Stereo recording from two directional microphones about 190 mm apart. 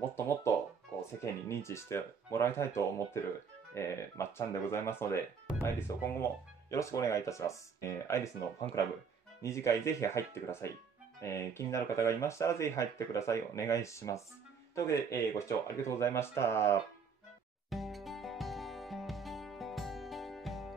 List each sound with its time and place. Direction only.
0.1 s music: 10° left (ahead or behind)
1.2 s speech: 15° left (ahead or behind)
17.6 s music: centre (ahead or behind)